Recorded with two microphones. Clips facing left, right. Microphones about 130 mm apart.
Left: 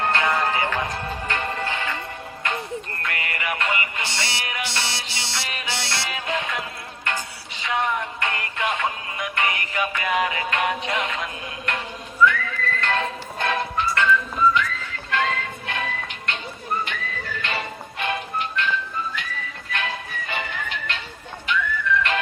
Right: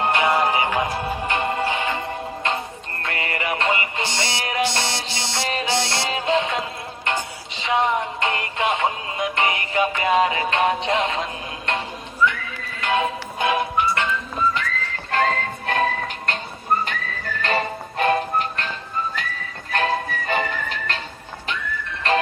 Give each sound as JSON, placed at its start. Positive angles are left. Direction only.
{"t": 0.0, "sound": "music", "side_deg": -20}
{"t": 3.0, "sound": "music", "side_deg": -30}
{"t": 4.1, "sound": "music", "side_deg": -20}
{"t": 4.4, "sound": "music", "side_deg": -40}
{"t": 5.8, "sound": "music", "side_deg": -20}
{"t": 12.2, "sound": "horse", "side_deg": -25}
{"t": 12.8, "sound": "music", "side_deg": -10}
{"t": 15.1, "sound": "music", "side_deg": -40}